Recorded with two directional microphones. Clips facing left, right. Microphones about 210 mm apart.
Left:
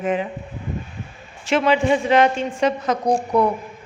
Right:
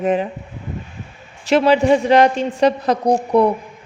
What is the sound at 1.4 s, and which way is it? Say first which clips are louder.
A woman's voice: right 4 dB; 40° right (ahead or behind).